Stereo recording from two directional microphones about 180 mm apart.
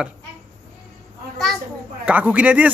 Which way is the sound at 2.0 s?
5° right (ahead or behind).